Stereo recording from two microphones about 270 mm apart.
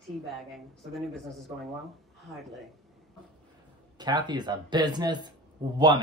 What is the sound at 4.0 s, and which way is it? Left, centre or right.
Speech, centre.